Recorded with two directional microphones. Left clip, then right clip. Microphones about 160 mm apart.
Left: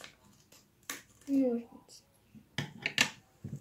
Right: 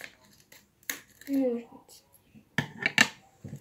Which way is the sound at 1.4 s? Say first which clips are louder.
Right 4 dB; 10° left (ahead or behind).